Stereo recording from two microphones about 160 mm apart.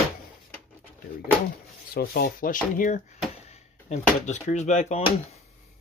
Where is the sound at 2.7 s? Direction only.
50° left (ahead or behind).